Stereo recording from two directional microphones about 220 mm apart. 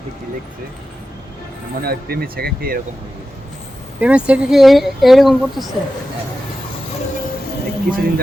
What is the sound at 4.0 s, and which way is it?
Speech, 5° right (ahead or behind).